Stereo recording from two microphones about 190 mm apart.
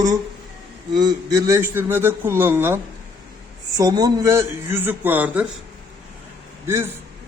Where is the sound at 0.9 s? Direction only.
20° right (ahead or behind).